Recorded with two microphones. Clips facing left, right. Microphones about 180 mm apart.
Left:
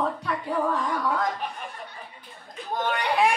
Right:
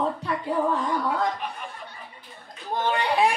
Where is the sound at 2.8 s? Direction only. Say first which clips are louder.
Right 2 dB; 30° right (ahead or behind).